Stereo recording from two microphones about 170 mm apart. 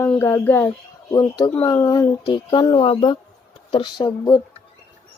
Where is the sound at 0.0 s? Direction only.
15° left (ahead or behind).